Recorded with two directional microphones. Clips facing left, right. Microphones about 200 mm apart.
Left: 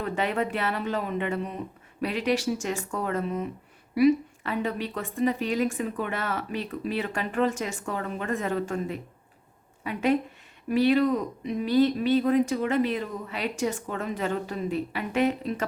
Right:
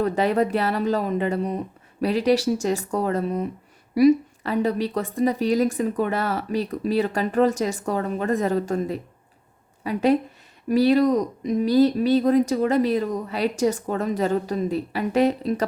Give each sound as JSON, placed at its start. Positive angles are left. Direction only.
{"t": 0.0, "sound": "speech", "side_deg": -35}